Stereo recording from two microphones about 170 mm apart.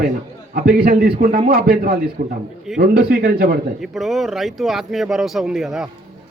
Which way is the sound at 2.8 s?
60° right (ahead or behind).